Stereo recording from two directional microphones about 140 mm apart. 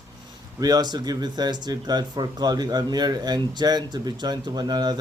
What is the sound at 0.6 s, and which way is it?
Speech, 25° right (ahead or behind).